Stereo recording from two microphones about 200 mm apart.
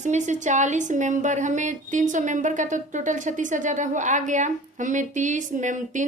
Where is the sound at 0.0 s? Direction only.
35° right (ahead or behind).